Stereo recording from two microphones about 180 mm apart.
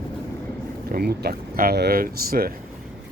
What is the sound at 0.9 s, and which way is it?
Speech, 60° right (ahead or behind).